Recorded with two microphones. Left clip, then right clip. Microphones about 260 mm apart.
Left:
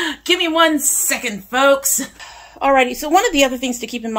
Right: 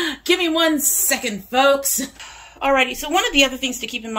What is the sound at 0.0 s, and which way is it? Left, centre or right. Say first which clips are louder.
Speech: left 2 dB; centre.